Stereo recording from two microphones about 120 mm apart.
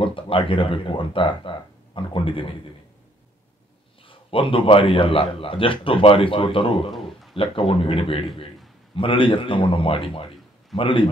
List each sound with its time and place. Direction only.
0.0 s speech: 45° left (ahead or behind)
4.0 s speech: 50° left (ahead or behind)
6.9 s a sound: centre (ahead or behind)
7.3 s speech: 50° left (ahead or behind)